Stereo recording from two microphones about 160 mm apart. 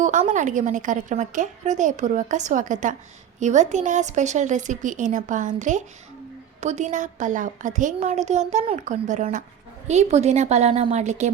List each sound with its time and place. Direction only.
0.0 s a woman's voice: 50° right (ahead or behind)